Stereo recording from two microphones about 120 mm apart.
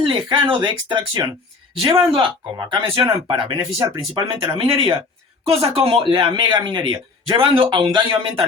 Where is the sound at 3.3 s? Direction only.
40° right (ahead or behind).